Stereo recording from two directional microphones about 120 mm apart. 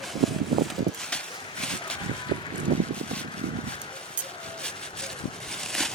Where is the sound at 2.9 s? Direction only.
10° left (ahead or behind).